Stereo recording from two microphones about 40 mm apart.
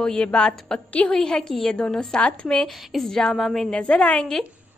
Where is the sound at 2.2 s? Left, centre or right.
Left.